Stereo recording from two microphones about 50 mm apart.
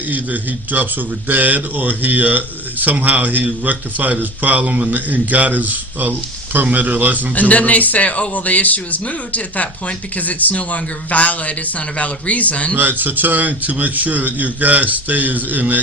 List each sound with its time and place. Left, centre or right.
0.1 s a man's voice: right
7.3 s speech: left
12.7 s a man's voice: right